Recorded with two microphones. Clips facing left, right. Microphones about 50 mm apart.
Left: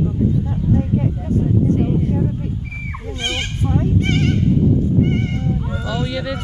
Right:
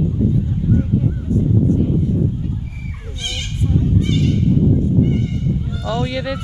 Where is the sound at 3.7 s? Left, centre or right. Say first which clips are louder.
Even; left.